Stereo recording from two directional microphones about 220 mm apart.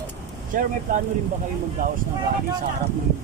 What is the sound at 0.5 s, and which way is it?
Speech, 35° right (ahead or behind).